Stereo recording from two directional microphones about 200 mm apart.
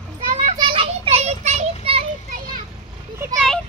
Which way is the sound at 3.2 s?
15° right (ahead or behind).